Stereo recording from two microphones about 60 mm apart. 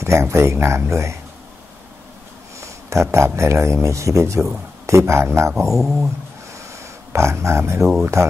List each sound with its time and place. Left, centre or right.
0.0 s speech: right
2.9 s speech: right
5.7 s speech: centre
7.1 s speech: right